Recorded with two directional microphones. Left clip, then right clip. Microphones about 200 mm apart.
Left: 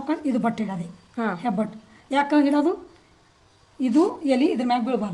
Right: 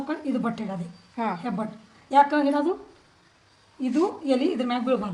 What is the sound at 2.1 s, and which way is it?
Speech, 50° left (ahead or behind).